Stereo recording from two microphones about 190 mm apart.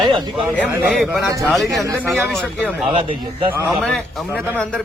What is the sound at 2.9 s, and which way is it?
Speech, 30° right (ahead or behind).